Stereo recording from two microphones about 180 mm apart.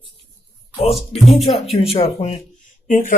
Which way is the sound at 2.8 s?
50° left (ahead or behind).